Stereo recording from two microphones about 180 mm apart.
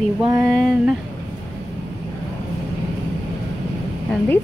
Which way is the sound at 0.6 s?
5° right (ahead or behind).